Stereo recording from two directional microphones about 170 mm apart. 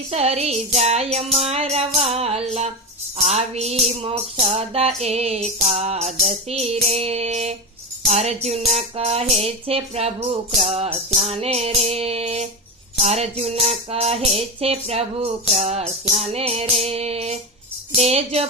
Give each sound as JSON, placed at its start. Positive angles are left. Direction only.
{"t": 0.1, "sound": "music", "side_deg": -35}